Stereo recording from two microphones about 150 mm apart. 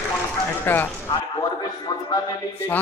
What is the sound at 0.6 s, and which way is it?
Speech, 15° left (ahead or behind).